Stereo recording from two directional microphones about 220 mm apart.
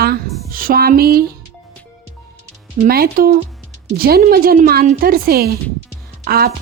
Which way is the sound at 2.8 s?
45° right (ahead or behind).